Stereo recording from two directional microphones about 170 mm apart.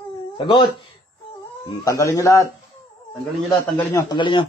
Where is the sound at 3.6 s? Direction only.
15° left (ahead or behind).